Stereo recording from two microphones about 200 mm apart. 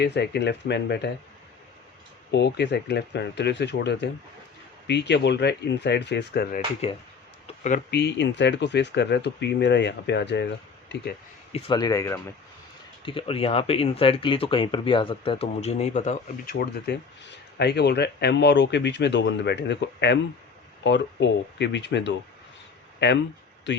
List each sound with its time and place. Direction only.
0.0 s speech: 55° left (ahead or behind)
2.3 s speech: 60° left (ahead or behind)
6.8 s speech: 30° left (ahead or behind)
7.4 s a sound: 35° left (ahead or behind)
7.9 s speech: 60° left (ahead or behind)
11.5 s speech: 20° left (ahead or behind)
13.1 s speech: 25° left (ahead or behind); by 23.8 s 65° left (ahead or behind)